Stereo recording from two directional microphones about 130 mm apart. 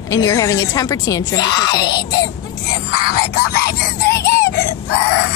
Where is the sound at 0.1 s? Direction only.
25° left (ahead or behind).